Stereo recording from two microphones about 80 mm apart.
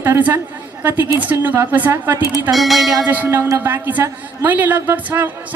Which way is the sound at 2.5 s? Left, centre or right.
Centre.